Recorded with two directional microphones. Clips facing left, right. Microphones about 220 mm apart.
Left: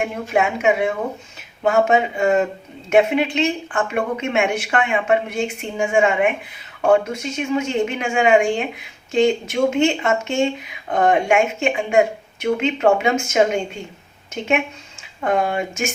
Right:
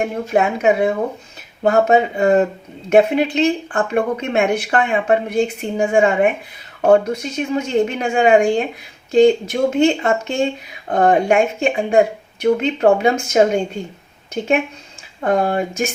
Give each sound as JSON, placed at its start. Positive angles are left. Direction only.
{"t": 0.0, "sound": "speech", "side_deg": -35}
{"t": 15.2, "sound": "speech", "side_deg": -35}